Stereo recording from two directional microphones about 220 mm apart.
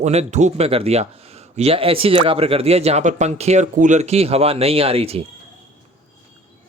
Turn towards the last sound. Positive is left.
turn(degrees=-25)  # may be behind; listen again after turning